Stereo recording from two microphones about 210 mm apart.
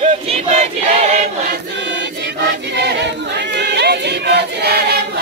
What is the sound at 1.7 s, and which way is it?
Choir, 55° right (ahead or behind).